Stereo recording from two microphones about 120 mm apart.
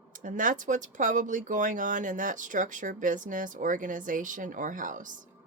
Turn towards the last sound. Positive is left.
turn(degrees=-90)